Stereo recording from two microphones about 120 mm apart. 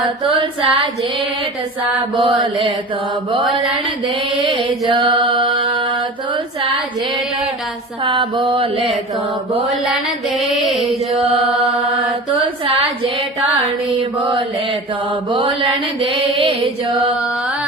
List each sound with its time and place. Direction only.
0.0 s mantra: 45° right (ahead or behind)
2.4 s mantra: 45° right (ahead or behind)
4.4 s mantra: 45° right (ahead or behind)
8.0 s mantra: 45° right (ahead or behind)
9.6 s mantra: centre (ahead or behind)
11.1 s mantra: 50° right (ahead or behind)
13.9 s mantra: 40° right (ahead or behind)